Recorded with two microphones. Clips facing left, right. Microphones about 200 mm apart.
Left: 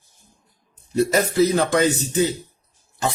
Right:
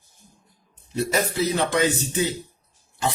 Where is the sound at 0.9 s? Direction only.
45° left (ahead or behind).